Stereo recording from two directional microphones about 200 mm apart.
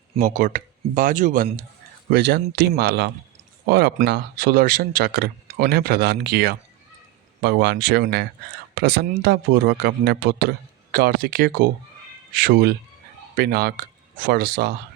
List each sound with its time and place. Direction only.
0.2 s speech: 45° right (ahead or behind)
2.0 s speech: 55° right (ahead or behind)